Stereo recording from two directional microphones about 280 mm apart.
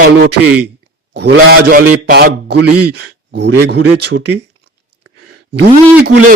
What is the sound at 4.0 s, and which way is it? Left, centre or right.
Speech, right.